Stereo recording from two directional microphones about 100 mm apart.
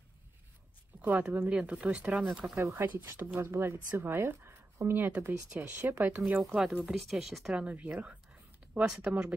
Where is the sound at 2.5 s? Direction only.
25° right (ahead or behind).